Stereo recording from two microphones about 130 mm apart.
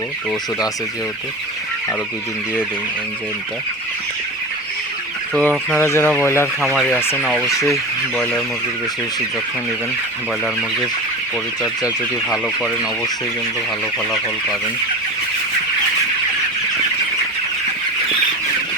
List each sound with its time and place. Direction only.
5.4 s speech: 15° left (ahead or behind)
6.7 s speech: 10° left (ahead or behind)
7.0 s speech: 20° left (ahead or behind)
7.3 s fowl: centre (ahead or behind)